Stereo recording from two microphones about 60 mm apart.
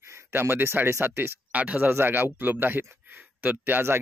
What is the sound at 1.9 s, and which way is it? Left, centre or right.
Speech, right.